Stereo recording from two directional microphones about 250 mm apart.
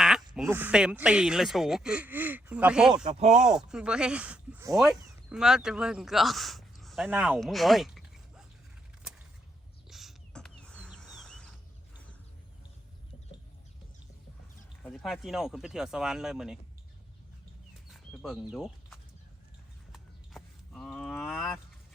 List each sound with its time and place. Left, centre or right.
0.0 s speech: centre
2.9 s speech: centre
3.3 s speech: centre
9.9 s a sound: centre
14.8 s speech: centre
17.8 s a sound: centre